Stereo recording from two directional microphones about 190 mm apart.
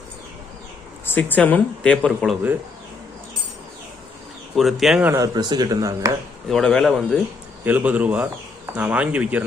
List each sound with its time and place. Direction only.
1.0 s speech: 10° left (ahead or behind)
4.5 s speech: centre (ahead or behind); by 6.1 s 15° right (ahead or behind)
6.5 s speech: 5° left (ahead or behind)
7.6 s speech: 10° right (ahead or behind)